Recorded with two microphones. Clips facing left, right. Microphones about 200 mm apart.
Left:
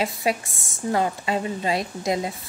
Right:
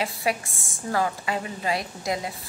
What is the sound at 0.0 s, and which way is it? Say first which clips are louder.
A woman's voice: left 3 dB; 25° left (ahead or behind).